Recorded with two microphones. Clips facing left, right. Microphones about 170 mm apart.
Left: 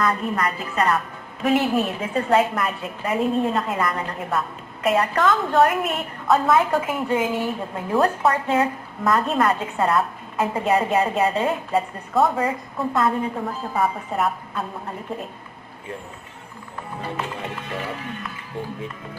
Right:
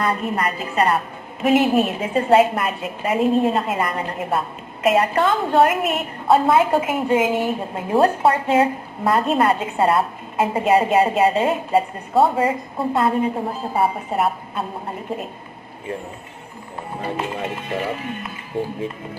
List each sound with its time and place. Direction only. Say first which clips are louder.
0.0 s a woman's voice: right 1 dB; 30° right (ahead or behind)
17.2 s a woman's voice: right 4 dB; 20° right (ahead or behind)